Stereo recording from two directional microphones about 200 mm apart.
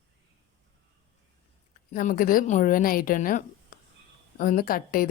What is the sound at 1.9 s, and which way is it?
A woman's voice, 40° left (ahead or behind).